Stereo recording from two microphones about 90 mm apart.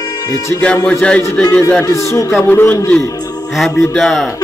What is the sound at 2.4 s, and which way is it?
Speech, 25° left (ahead or behind).